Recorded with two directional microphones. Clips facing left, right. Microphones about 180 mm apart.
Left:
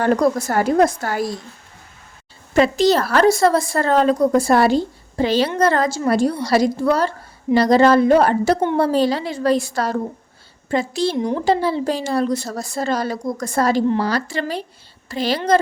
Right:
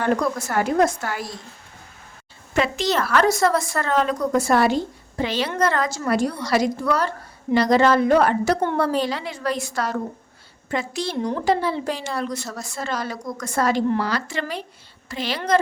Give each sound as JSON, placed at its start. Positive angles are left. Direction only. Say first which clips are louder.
{"t": 0.0, "sound": "a woman's voice", "louder": "left 5 dB", "side_deg": 35}
{"t": 2.6, "sound": "a woman's voice", "louder": "left 7 dB", "side_deg": 35}